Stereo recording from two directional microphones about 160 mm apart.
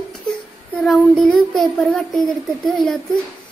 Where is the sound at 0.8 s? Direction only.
5° left (ahead or behind).